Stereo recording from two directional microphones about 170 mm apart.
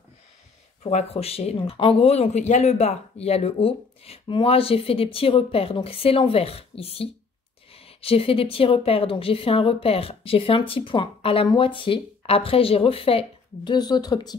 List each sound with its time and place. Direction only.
0.8 s speech: 40° left (ahead or behind)